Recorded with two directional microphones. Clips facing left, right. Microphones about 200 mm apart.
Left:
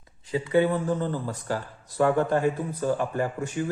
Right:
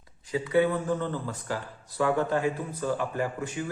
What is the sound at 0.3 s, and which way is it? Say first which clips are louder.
A man's voice: left 2 dB; 25° left (ahead or behind).